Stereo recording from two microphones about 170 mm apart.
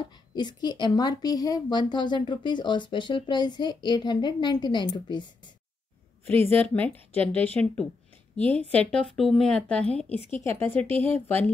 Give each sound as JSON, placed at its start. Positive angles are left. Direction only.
{"t": 0.3, "sound": "a woman's voice", "side_deg": 25}
{"t": 6.2, "sound": "speech", "side_deg": 10}